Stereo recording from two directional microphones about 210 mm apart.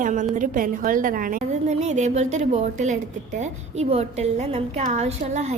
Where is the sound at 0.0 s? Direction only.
40° right (ahead or behind).